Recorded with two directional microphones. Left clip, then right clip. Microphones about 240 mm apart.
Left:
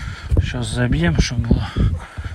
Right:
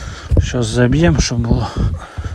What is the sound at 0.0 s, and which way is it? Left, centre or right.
Speech, right.